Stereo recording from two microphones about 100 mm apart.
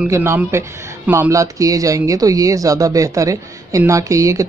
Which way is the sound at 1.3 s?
35° right (ahead or behind).